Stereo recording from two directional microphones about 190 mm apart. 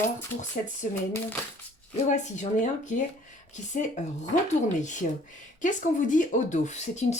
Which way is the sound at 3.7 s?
45° left (ahead or behind).